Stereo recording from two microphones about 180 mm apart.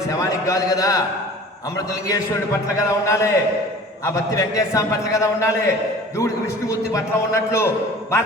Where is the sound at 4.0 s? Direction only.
15° left (ahead or behind).